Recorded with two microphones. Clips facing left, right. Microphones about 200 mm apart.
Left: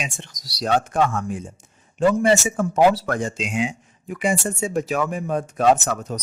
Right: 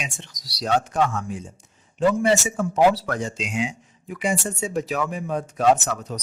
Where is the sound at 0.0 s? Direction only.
50° left (ahead or behind).